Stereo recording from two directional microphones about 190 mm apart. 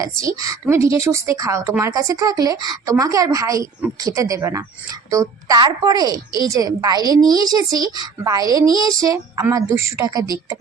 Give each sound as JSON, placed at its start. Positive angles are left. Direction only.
{"t": 0.0, "sound": "a woman's voice", "side_deg": -15}